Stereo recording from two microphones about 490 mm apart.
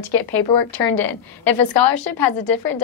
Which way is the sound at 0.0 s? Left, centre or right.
Left.